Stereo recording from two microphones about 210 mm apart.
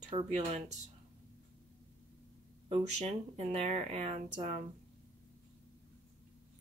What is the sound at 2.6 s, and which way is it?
Speech, 30° right (ahead or behind).